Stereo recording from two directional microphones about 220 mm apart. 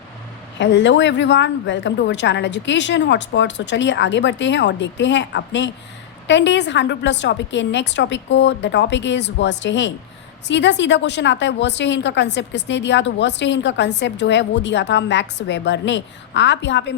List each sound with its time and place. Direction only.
0.6 s a woman's voice: 55° left (ahead or behind)